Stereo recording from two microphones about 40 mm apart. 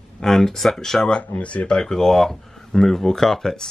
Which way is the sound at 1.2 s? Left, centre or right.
Left.